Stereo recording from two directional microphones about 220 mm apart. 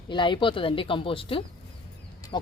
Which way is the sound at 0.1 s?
20° left (ahead or behind).